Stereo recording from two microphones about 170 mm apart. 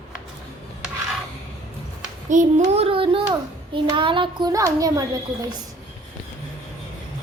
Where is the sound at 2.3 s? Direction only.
45° right (ahead or behind).